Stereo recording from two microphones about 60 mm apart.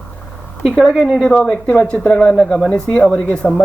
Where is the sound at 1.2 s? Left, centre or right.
Centre.